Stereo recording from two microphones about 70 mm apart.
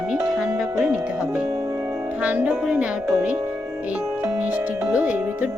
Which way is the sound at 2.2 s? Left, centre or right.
Right.